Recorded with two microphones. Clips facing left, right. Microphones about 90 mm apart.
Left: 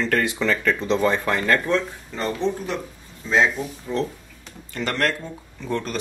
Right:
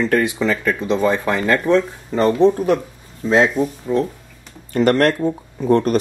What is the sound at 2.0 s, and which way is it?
Speech, 55° right (ahead or behind).